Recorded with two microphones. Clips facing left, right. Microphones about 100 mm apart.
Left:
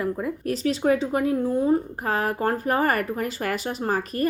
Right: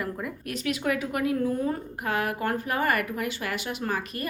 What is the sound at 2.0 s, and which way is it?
Speech, 35° left (ahead or behind).